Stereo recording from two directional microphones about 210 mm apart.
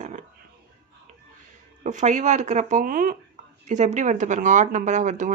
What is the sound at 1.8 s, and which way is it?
Speech, 35° right (ahead or behind).